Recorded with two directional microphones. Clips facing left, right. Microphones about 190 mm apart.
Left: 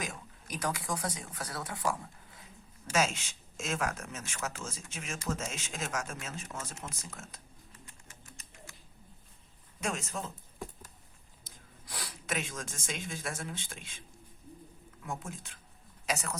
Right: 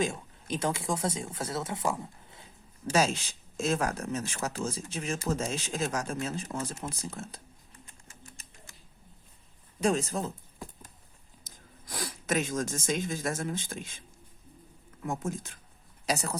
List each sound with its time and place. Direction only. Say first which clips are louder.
0.0 s speech: right 10 dB; 25° right (ahead or behind)
2.9 s speech: right 4 dB; 35° right (ahead or behind)
9.8 s speech: right 9 dB; 35° right (ahead or behind)
11.4 s speech: right 3 dB; 45° right (ahead or behind)
15.0 s speech: right 7 dB; 45° right (ahead or behind)